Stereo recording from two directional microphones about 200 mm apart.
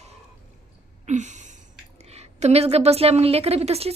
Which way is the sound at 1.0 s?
35° right (ahead or behind).